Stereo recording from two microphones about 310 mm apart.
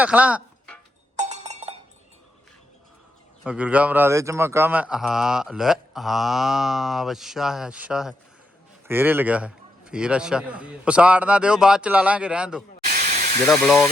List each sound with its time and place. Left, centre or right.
0.0 s music: centre
1.1 s a sound: right
3.4 s speech: centre